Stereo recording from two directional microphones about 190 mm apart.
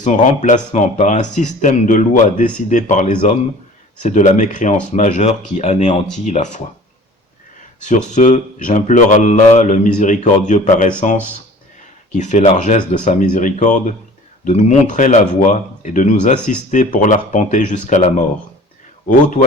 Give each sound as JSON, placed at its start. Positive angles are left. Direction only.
{"t": 0.0, "sound": "speech", "side_deg": 40}
{"t": 7.9, "sound": "speech", "side_deg": 40}